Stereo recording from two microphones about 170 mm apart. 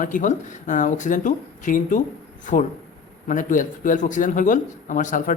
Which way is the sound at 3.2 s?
50° left (ahead or behind).